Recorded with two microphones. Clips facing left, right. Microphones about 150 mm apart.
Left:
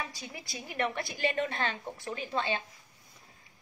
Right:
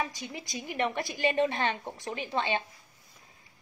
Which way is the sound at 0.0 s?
20° right (ahead or behind).